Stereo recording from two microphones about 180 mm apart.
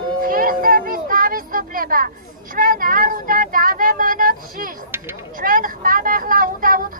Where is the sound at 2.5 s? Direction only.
50° right (ahead or behind).